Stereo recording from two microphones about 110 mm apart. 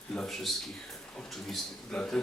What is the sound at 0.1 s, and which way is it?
A man's voice, 5° left (ahead or behind).